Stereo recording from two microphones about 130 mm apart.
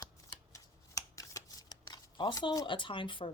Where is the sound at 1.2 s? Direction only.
30° left (ahead or behind).